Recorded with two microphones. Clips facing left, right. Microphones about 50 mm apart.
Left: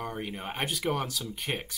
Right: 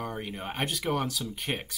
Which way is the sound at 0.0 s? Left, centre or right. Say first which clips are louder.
Even; centre.